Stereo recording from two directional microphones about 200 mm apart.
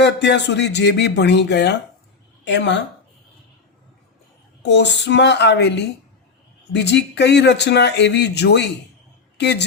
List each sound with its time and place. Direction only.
0.0 s a woman's voice: 60° left (ahead or behind)
4.6 s speech: 60° left (ahead or behind)